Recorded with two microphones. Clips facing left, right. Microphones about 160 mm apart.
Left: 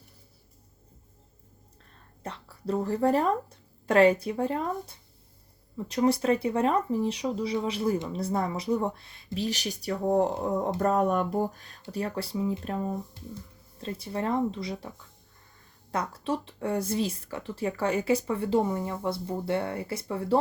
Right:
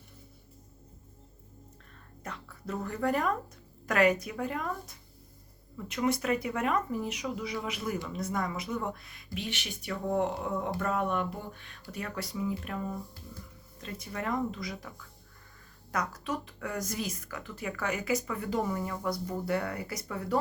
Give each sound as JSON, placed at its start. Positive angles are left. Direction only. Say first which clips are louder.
{"t": 2.2, "sound": "a woman's voice", "louder": "left 6 dB", "side_deg": 30}